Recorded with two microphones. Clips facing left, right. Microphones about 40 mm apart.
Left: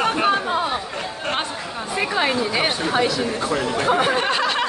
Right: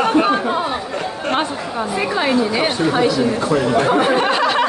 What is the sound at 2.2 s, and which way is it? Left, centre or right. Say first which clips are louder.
Speech: right 4 dB; left.